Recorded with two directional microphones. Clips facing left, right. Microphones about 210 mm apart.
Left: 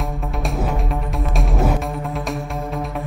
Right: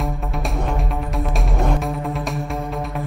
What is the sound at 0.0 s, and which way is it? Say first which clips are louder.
Music: even; centre (ahead or behind).